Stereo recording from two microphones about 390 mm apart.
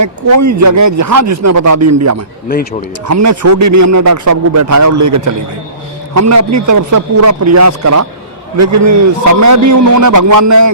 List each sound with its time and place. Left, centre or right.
0.0 s a man's voice: right